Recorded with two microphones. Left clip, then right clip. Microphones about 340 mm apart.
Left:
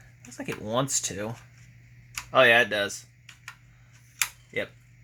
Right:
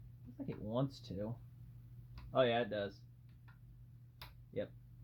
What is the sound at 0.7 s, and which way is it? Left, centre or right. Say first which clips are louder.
Speech: left 14 dB; left.